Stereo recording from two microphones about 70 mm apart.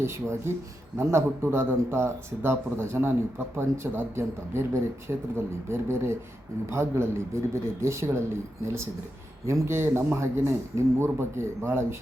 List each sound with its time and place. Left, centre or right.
0.0 s speech: right
9.6 s speech: right